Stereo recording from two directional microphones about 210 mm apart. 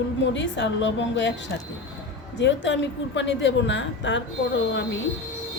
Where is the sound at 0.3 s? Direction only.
60° left (ahead or behind).